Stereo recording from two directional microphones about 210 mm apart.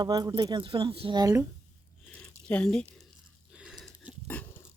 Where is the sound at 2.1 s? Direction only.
5° left (ahead or behind).